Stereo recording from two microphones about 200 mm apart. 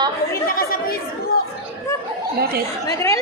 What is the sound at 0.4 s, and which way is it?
Chatter, 45° left (ahead or behind).